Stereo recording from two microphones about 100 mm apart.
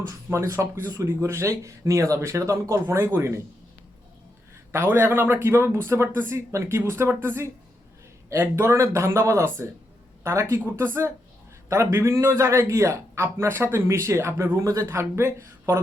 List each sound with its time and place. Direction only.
0.3 s a man's voice: 25° right (ahead or behind)
4.7 s a man's voice: 25° right (ahead or behind)